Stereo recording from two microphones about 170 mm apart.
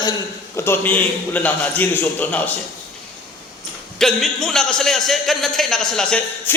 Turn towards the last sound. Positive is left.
turn(degrees=5)  # may be behind; listen again after turning